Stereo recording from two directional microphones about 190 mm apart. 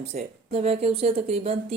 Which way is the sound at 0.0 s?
35° right (ahead or behind).